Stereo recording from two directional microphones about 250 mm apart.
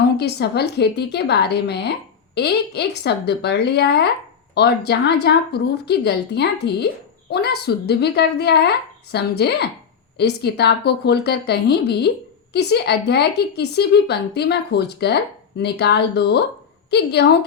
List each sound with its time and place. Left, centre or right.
0.2 s a woman's voice: left